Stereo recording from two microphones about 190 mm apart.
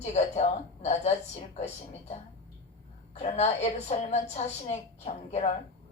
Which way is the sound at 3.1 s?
35° left (ahead or behind).